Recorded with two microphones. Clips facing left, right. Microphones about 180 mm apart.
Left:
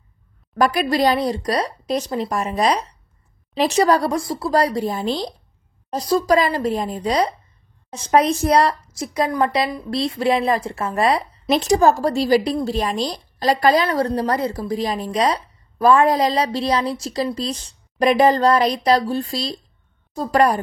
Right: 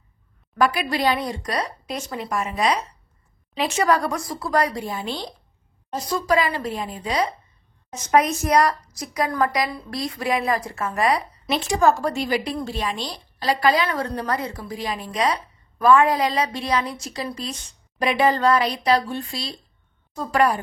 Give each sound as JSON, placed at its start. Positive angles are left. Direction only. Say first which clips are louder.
{"t": 0.6, "sound": "a woman's voice", "louder": "left 4 dB", "side_deg": 40}
{"t": 11.4, "sound": "a woman's voice", "louder": "left 4 dB", "side_deg": 40}